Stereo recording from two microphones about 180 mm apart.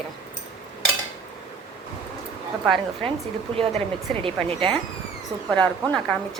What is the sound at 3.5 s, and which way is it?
Speech, 30° right (ahead or behind).